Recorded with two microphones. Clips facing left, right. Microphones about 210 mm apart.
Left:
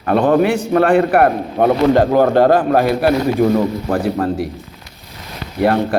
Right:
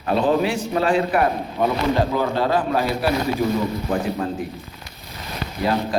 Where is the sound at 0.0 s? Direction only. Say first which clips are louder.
Left 6 dB; 60° left (ahead or behind).